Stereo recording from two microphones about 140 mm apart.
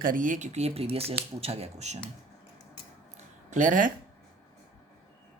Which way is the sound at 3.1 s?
60° right (ahead or behind).